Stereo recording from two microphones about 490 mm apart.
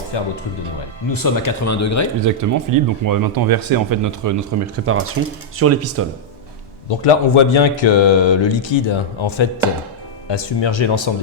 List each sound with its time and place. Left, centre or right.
0.1 s speech: left
1.1 s speech: left
2.2 s speech: right
7.0 s speech: left